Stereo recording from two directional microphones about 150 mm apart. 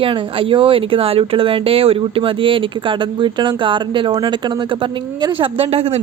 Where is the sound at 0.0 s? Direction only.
35° right (ahead or behind).